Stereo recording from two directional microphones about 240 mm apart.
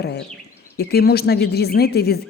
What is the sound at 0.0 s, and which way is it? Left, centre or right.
A woman's voice, left.